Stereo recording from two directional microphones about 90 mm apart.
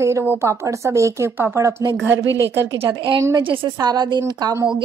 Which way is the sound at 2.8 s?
60° right (ahead or behind).